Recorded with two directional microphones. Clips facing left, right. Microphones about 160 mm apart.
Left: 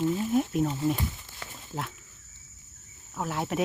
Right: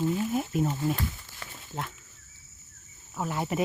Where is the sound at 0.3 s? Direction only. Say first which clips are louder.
Left 2 dB; centre (ahead or behind).